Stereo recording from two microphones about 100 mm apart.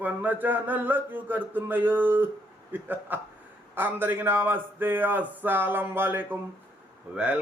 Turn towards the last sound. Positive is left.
turn(degrees=-10)  # may be behind; listen again after turning